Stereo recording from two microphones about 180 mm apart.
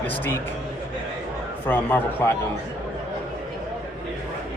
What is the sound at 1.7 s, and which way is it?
Speech, 10° left (ahead or behind).